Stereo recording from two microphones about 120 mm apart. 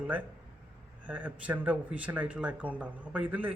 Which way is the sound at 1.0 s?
10° right (ahead or behind).